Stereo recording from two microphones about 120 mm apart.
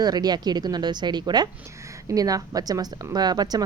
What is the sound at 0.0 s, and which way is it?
Speech, 35° right (ahead or behind).